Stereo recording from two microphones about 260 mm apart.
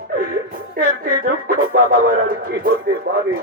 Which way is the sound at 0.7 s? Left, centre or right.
Right.